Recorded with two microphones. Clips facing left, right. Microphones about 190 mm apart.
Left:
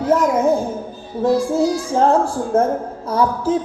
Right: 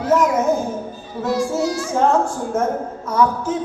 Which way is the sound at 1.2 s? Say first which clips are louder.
Left 4 dB; 30° left (ahead or behind).